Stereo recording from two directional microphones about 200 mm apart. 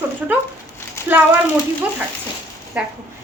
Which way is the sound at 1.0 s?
15° left (ahead or behind).